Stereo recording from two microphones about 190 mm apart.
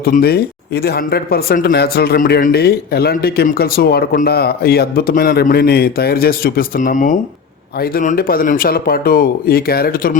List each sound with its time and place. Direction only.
0.0 s speech: 55° left (ahead or behind)